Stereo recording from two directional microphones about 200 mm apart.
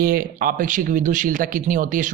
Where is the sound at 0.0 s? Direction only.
45° right (ahead or behind).